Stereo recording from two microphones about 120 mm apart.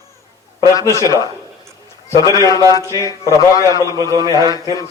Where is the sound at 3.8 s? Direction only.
30° right (ahead or behind).